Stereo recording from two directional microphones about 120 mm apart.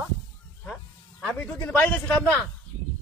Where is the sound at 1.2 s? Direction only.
5° left (ahead or behind).